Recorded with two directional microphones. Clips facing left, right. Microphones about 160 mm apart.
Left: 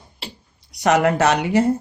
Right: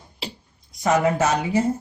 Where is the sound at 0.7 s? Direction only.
75° left (ahead or behind).